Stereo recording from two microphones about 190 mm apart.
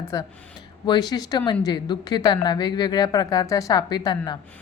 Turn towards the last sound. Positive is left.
turn(degrees=20)  # may be behind; listen again after turning